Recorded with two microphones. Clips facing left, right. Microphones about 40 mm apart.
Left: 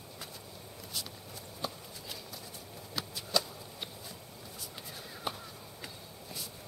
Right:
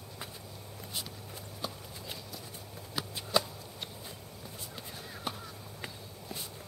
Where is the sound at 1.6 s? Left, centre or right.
Centre.